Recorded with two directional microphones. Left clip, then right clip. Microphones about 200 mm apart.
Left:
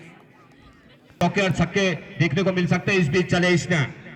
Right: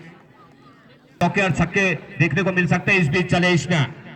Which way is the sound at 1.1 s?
10° right (ahead or behind).